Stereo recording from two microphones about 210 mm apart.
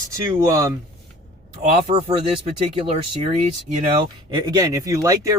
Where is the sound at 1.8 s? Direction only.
25° right (ahead or behind).